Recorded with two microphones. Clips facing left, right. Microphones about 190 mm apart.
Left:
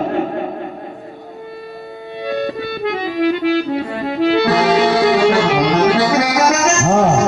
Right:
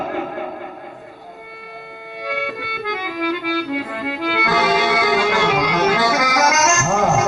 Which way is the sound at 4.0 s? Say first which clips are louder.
Left 8 dB; 35° left (ahead or behind).